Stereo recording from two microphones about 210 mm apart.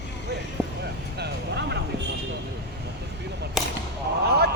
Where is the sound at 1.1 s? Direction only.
50° right (ahead or behind).